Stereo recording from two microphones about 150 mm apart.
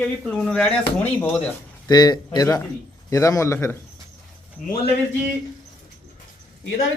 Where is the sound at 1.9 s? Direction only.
25° left (ahead or behind).